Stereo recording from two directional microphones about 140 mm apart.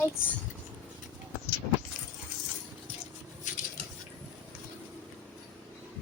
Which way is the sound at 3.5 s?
65° left (ahead or behind).